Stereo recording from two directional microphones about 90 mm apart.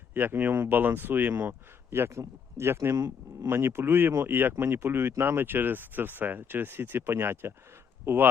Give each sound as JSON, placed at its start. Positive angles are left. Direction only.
{"t": 0.1, "sound": "speech", "side_deg": -20}
{"t": 3.5, "sound": "speech", "side_deg": -25}